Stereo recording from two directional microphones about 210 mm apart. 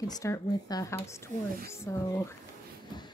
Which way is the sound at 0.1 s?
15° left (ahead or behind).